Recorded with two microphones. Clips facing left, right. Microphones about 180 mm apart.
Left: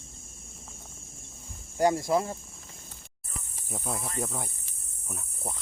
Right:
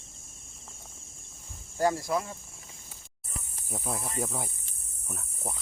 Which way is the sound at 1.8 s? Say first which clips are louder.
Left 3 dB; 20° left (ahead or behind).